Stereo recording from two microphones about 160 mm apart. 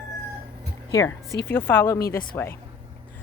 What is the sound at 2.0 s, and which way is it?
Speech, 70° left (ahead or behind).